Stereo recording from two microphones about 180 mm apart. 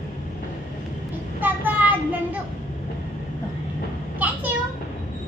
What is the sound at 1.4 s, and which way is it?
Child singing, 10° right (ahead or behind).